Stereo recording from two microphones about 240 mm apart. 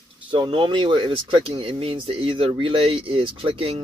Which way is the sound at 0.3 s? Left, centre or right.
Centre.